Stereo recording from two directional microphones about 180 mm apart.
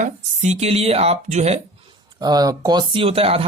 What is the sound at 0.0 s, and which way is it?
Speech, 40° right (ahead or behind).